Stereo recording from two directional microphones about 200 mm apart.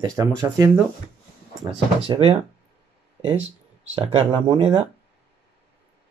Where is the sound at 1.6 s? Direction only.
25° right (ahead or behind).